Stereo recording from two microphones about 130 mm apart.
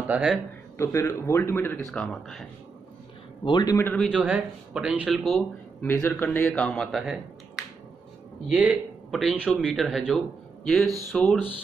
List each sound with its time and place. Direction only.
0.1 s speech: 5° right (ahead or behind)
0.7 s a man's voice: 20° left (ahead or behind)
1.9 s speech: 5° left (ahead or behind)
3.4 s a man's voice: 35° left (ahead or behind)
4.1 s speech: 10° right (ahead or behind)
5.8 s speech: 15° left (ahead or behind)